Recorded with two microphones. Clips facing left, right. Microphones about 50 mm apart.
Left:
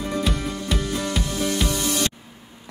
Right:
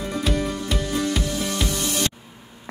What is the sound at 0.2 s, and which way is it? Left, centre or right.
Music, centre.